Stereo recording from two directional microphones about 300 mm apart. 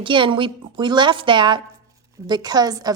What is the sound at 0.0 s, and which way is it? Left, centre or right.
A woman's voice, centre.